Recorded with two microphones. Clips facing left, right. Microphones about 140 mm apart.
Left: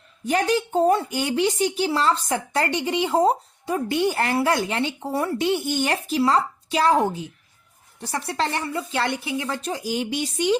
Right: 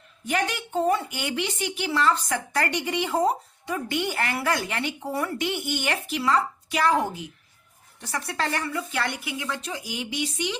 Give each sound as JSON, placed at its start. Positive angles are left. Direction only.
{"t": 0.3, "sound": "a woman's voice", "side_deg": 35}